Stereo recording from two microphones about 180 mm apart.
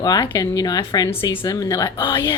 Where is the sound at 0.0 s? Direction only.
20° left (ahead or behind).